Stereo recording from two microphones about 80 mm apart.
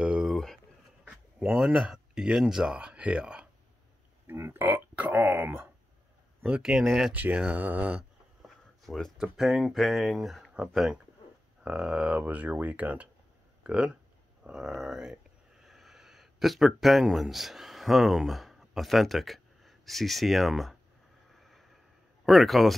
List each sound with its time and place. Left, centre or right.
0.0 s a sound: centre
0.3 s a sound: centre
1.0 s speech: centre
4.3 s speech: right
6.4 s speech: centre
7.2 s speech: centre
8.4 s a sound: centre
9.2 s speech: centre
21.4 s vehicle: centre
22.2 s speech: centre